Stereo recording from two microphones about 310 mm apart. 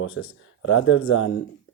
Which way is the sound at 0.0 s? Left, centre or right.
Left.